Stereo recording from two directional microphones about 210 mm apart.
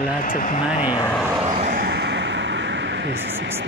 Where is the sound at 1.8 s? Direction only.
50° right (ahead or behind).